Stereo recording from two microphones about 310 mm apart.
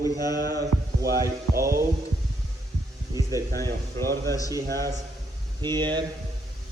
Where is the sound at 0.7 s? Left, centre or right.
Right.